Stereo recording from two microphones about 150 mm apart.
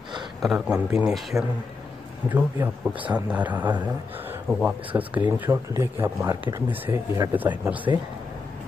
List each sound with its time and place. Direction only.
0.4 s speech: 5° right (ahead or behind)